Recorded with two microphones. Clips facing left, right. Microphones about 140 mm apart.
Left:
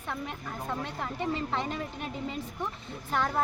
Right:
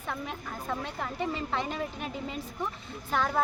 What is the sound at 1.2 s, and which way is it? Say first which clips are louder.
Speech: left 1 dB; centre (ahead or behind).